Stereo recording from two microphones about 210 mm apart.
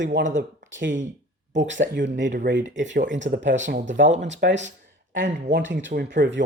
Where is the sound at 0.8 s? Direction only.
60° right (ahead or behind).